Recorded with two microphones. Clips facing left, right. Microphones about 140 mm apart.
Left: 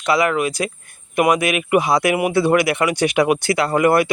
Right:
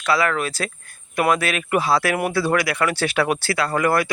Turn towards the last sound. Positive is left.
turn(degrees=20)  # may be behind; listen again after turning